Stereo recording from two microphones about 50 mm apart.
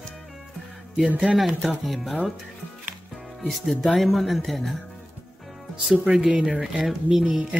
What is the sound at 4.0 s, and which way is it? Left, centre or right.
Music, centre.